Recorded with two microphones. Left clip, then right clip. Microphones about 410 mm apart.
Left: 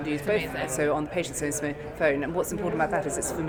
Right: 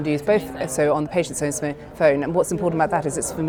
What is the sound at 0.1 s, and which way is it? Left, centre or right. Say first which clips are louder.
Speech: right 7 dB; right.